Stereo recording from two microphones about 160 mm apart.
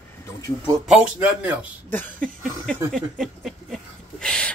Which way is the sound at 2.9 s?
Centre (ahead or behind).